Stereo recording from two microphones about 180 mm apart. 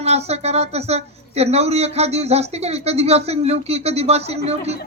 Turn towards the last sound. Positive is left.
turn(degrees=-35)  # may be behind; listen again after turning